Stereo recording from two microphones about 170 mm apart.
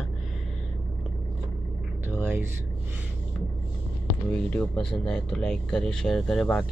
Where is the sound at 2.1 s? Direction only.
10° right (ahead or behind).